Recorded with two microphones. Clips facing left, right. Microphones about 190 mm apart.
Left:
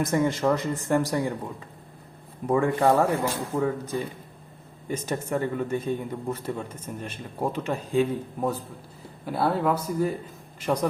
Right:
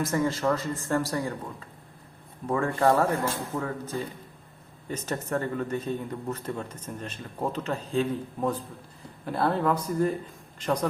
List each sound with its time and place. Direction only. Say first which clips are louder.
0.0 s a man's voice: left 3 dB; 15° left (ahead or behind)
2.5 s a man's voice: left 2 dB; 20° left (ahead or behind)